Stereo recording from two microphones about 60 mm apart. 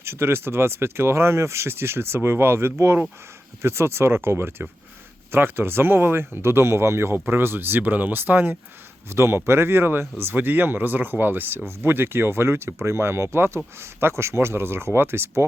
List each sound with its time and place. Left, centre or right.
0.0 s speech: right
9.0 s speech: right